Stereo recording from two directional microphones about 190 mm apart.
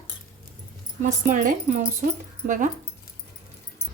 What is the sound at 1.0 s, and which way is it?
Speech, 45° right (ahead or behind).